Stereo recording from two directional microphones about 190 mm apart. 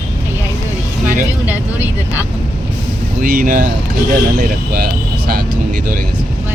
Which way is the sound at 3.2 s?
45° right (ahead or behind).